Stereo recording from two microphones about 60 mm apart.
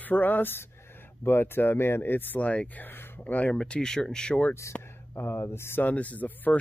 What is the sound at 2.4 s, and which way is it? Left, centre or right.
Speech, left.